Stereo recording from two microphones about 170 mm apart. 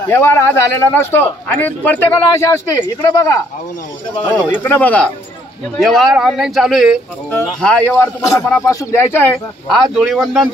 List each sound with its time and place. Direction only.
0.1 s a man's voice: 15° left (ahead or behind)
7.6 s a man's voice: 10° left (ahead or behind)
9.9 s speech: centre (ahead or behind)